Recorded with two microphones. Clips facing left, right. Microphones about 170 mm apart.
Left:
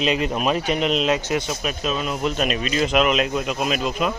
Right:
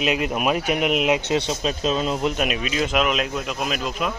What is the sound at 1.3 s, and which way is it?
Speech, 25° right (ahead or behind).